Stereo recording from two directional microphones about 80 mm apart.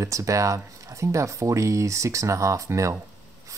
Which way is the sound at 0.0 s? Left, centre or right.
Right.